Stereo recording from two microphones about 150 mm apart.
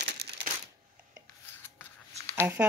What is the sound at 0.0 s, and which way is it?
Typewriter, 90° right.